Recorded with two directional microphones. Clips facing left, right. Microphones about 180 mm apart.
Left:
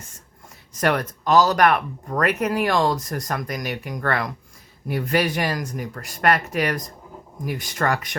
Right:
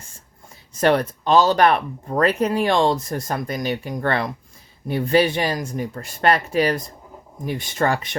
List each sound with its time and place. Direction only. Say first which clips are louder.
0.7 s speech: right 4 dB; 30° right (ahead or behind)